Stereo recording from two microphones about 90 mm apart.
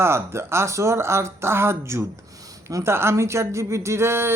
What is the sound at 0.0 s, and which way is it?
Speech, 30° right (ahead or behind).